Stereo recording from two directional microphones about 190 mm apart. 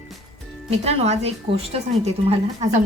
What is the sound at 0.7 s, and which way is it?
A woman's voice, 35° right (ahead or behind).